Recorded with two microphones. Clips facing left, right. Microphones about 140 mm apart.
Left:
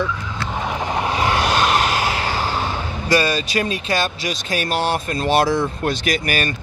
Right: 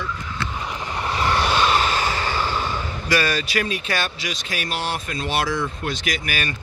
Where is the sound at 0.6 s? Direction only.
65° left (ahead or behind).